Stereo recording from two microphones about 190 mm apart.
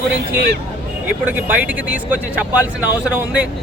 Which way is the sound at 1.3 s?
10° right (ahead or behind).